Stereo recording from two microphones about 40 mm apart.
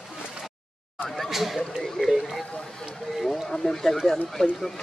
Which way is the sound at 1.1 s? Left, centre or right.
Centre.